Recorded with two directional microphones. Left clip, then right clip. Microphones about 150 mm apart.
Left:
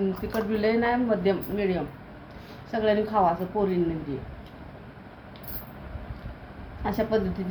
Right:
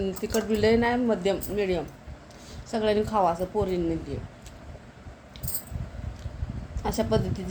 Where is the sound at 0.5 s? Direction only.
90° right.